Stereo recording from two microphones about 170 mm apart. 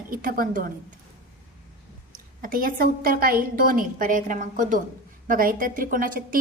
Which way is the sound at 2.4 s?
55° right (ahead or behind).